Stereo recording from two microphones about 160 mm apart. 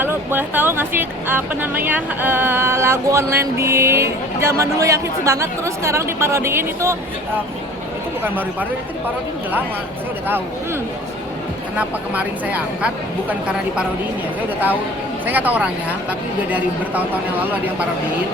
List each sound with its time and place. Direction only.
0.0 s speech: 15° right (ahead or behind)
11.8 s speech: 10° right (ahead or behind)
15.3 s speech: 10° right (ahead or behind)